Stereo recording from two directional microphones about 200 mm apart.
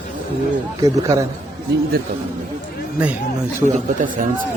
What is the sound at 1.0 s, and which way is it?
Speech, 15° right (ahead or behind).